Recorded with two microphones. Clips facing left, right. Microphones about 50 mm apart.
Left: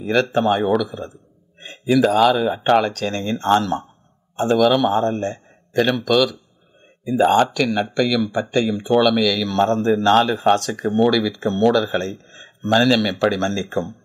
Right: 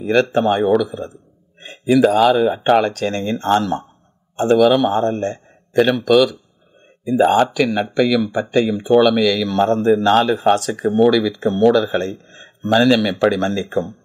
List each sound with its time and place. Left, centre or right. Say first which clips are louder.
0.0 s speech: right 2 dB; centre